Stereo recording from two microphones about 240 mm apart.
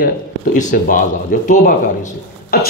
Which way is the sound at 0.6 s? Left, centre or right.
Left.